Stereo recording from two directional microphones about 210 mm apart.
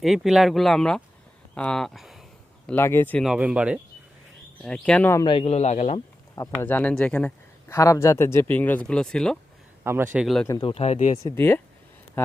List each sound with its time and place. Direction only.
0.0 s speech: centre (ahead or behind)
2.6 s speech: 10° left (ahead or behind)
5.2 s a man's voice: 25° left (ahead or behind)
6.3 s speech: 15° left (ahead or behind)
9.8 s a man's voice: 10° right (ahead or behind)
10.4 s speech: 15° left (ahead or behind)
10.7 s a man's voice: 30° left (ahead or behind)
11.2 s speech: 15° left (ahead or behind)